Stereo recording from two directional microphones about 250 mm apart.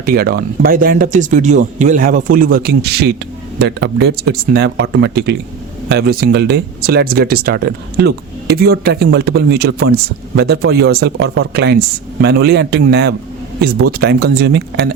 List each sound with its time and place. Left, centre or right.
0.0 s speech: right